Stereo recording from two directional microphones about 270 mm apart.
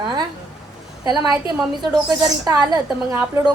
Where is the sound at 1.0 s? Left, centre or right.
Centre.